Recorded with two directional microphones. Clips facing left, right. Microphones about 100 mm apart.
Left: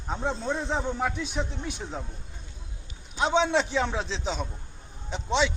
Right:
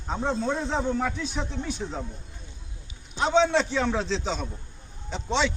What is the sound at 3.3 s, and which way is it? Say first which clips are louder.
A man's voice: right 2 dB; 15° left (ahead or behind).